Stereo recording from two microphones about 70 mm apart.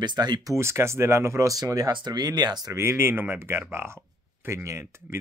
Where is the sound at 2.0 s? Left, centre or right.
Right.